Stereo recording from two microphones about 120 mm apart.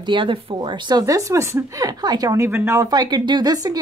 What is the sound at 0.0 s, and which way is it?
Speech, 45° right (ahead or behind).